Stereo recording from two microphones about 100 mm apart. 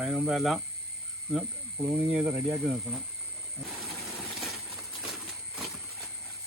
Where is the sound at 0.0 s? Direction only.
5° right (ahead or behind).